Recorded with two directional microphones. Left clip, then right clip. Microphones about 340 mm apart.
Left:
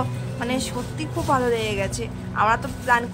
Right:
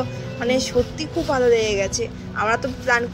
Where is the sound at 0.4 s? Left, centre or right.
Centre.